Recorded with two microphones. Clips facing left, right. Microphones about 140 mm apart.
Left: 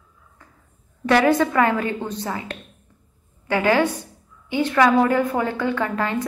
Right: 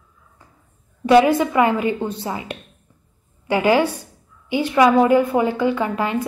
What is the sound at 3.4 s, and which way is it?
A woman's voice, 15° right (ahead or behind).